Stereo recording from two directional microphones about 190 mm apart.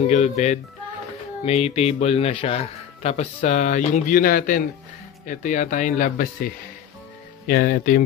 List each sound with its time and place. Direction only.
0.0 s speech: 35° left (ahead or behind)